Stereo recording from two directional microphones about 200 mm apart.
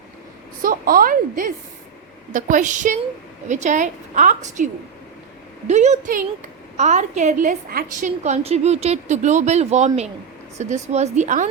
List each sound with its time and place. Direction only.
0.6 s a woman's voice: 45° right (ahead or behind)